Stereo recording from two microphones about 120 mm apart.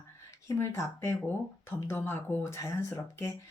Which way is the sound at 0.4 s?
25° left (ahead or behind).